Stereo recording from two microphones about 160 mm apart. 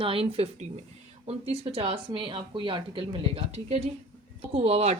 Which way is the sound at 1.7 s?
35° right (ahead or behind).